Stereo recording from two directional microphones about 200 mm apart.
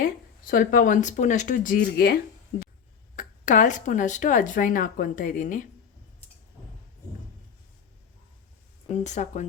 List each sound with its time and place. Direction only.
0.0 s speech: 45° left (ahead or behind)
8.9 s speech: 35° left (ahead or behind)